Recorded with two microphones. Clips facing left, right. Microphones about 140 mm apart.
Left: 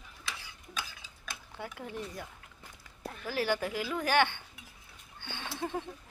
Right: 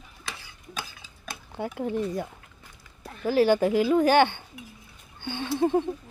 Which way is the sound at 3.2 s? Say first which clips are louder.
Right 11 dB; 25° right (ahead or behind).